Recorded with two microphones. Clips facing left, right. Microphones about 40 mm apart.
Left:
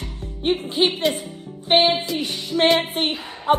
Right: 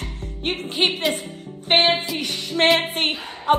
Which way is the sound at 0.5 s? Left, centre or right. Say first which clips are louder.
Left 2 dB; right.